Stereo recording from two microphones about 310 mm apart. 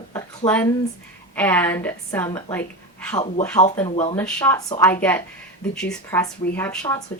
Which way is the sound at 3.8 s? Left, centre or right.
Centre.